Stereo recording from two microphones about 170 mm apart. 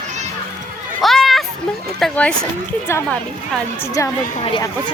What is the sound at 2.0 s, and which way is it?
Speech, 5° left (ahead or behind).